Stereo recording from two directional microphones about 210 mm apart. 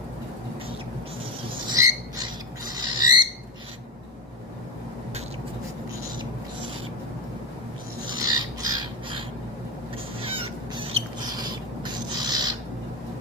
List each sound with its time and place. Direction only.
1.5 s rodents: 20° right (ahead or behind)
2.7 s bird: 20° right (ahead or behind)
8.1 s bird: 20° right (ahead or behind)
10.2 s a sound: 25° right (ahead or behind)